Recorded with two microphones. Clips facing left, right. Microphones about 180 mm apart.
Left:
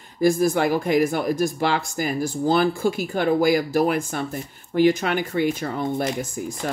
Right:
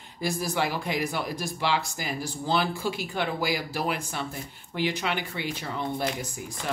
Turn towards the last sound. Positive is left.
turn(degrees=45)  # may be behind; listen again after turning